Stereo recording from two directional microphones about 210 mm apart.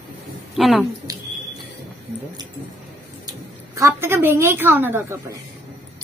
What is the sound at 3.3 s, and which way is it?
A woman's voice, 15° right (ahead or behind).